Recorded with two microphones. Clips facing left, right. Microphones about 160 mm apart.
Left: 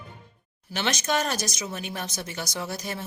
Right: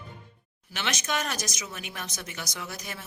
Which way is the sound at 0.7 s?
35° left (ahead or behind).